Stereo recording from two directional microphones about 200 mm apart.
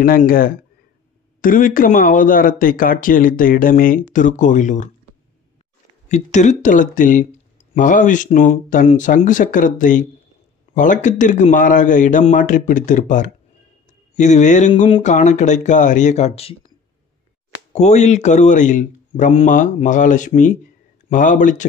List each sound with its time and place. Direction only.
0.0 s speech: 45° left (ahead or behind)
6.0 s speech: 35° left (ahead or behind)
17.7 s speech: 35° left (ahead or behind)